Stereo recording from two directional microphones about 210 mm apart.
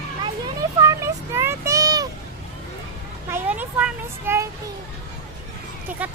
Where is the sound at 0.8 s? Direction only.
15° right (ahead or behind).